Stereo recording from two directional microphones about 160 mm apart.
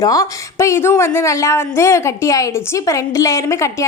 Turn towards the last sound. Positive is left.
turn(degrees=20)  # may be behind; listen again after turning